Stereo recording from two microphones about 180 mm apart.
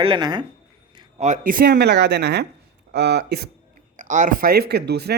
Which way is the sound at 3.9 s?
45° right (ahead or behind).